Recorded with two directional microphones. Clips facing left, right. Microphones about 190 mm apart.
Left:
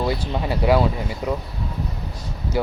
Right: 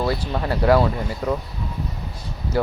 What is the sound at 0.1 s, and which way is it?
Speech, 10° left (ahead or behind).